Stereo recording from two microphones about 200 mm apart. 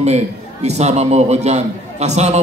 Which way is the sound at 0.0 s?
35° right (ahead or behind).